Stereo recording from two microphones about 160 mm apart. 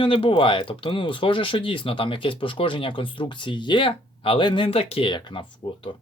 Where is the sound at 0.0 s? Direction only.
35° left (ahead or behind).